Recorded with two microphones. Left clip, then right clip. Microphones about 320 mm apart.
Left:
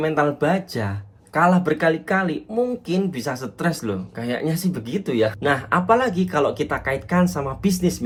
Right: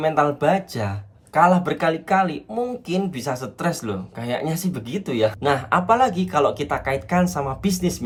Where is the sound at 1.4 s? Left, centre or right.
Right.